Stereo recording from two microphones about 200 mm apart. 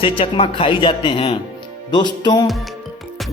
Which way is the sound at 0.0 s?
30° left (ahead or behind).